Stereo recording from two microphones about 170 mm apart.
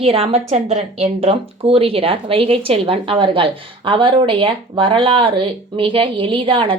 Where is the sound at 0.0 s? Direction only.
35° right (ahead or behind).